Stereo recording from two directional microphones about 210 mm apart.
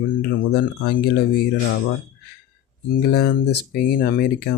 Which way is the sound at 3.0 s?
50° left (ahead or behind).